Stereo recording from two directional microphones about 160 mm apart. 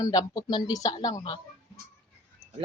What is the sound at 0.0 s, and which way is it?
Speech, 25° left (ahead or behind).